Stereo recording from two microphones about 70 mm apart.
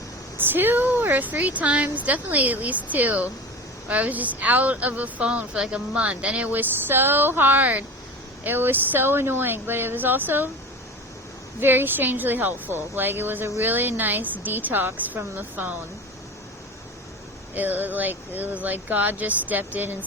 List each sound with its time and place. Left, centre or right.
0.3 s speech: right
11.6 s speech: right
17.5 s speech: right